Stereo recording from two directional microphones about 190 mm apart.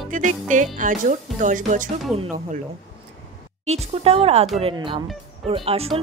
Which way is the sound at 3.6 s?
35° right (ahead or behind).